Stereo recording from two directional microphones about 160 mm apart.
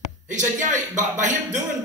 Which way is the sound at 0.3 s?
50° right (ahead or behind).